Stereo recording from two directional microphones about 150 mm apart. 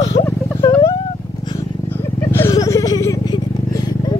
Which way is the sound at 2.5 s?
25° left (ahead or behind).